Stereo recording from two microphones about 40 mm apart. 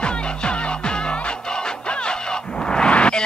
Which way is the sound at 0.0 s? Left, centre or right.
Left.